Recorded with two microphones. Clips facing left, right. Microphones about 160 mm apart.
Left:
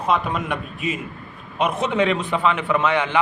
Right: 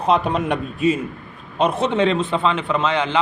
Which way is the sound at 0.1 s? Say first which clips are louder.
Right 4 dB; 35° right (ahead or behind).